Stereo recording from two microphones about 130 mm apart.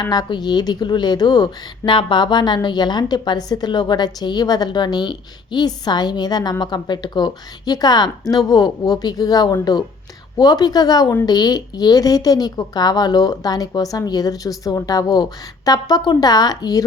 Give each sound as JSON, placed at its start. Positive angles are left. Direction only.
{"t": 0.0, "sound": "speech", "side_deg": 30}